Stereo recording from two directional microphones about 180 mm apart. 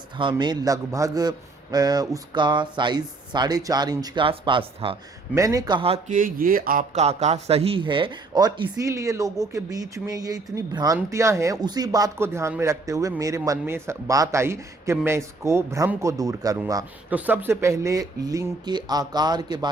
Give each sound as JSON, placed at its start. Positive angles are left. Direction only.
{"t": 0.2, "sound": "a man's voice", "side_deg": -25}
{"t": 5.3, "sound": "a man's voice", "side_deg": -20}
{"t": 6.1, "sound": "speech", "side_deg": -50}
{"t": 7.0, "sound": "a man's voice", "side_deg": -40}
{"t": 17.1, "sound": "a man's voice", "side_deg": -10}